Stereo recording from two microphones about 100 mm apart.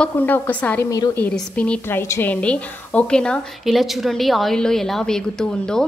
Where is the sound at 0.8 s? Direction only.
35° left (ahead or behind).